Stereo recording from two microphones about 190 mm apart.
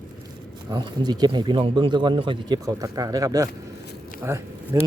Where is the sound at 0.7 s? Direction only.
20° right (ahead or behind).